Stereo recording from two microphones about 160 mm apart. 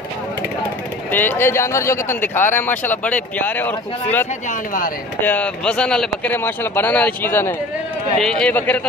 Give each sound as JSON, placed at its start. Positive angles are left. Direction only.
{"t": 1.1, "sound": "speech", "side_deg": 15}
{"t": 4.5, "sound": "speech", "side_deg": 60}
{"t": 5.2, "sound": "speech", "side_deg": 10}